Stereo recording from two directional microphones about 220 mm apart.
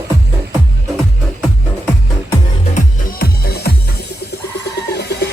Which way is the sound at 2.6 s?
40° left (ahead or behind).